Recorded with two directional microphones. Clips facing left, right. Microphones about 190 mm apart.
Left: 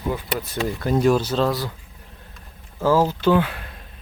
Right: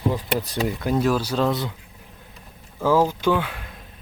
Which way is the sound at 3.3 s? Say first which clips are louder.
Left 4 dB; 5° left (ahead or behind).